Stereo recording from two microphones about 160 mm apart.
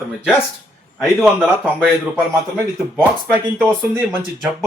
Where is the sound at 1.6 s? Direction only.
5° right (ahead or behind).